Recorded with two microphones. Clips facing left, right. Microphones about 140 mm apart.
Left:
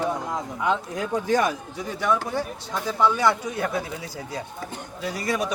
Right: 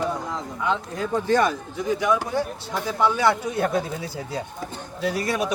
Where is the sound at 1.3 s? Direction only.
10° left (ahead or behind).